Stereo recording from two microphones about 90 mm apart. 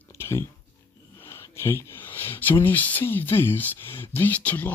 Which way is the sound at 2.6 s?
20° left (ahead or behind).